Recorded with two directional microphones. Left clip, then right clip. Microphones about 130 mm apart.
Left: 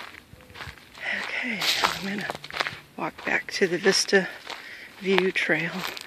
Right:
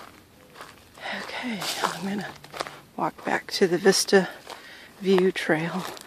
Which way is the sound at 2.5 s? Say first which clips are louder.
Left 2 dB; 15° right (ahead or behind).